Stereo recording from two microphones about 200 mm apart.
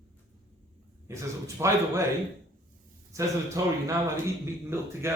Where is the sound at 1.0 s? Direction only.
15° right (ahead or behind).